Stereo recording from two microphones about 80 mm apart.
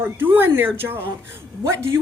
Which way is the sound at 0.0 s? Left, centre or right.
Right.